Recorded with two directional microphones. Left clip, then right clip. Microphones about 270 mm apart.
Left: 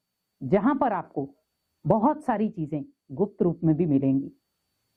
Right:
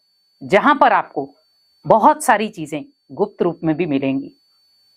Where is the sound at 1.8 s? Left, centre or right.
Centre.